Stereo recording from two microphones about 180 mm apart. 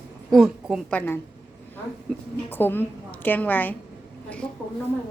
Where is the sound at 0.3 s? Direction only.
Centre (ahead or behind).